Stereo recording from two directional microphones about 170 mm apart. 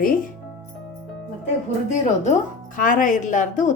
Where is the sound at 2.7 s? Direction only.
50° left (ahead or behind).